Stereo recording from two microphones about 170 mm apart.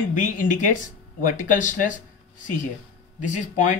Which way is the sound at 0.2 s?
50° left (ahead or behind).